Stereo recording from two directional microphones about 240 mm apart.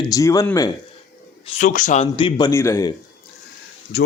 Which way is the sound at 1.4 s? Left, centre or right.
Left.